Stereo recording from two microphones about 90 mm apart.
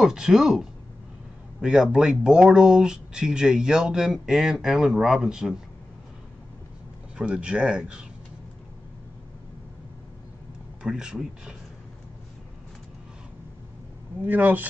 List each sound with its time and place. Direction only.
0.0 s speech: 5° right (ahead or behind)
7.2 s speech: 10° right (ahead or behind)
10.8 s speech: 10° right (ahead or behind)
14.2 s speech: 20° right (ahead or behind)